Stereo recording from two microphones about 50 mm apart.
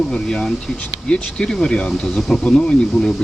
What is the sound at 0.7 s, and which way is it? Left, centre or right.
Speech, left.